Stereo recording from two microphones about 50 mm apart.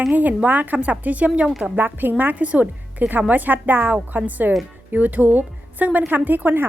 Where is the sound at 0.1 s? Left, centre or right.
Right.